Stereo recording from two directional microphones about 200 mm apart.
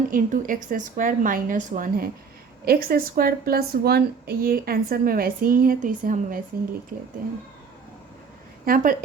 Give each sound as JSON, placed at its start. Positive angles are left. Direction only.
{"t": 0.1, "sound": "a woman's voice", "side_deg": -45}
{"t": 8.6, "sound": "a woman's voice", "side_deg": -45}